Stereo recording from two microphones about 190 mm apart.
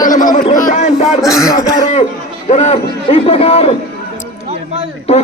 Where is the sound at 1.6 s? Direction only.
20° left (ahead or behind).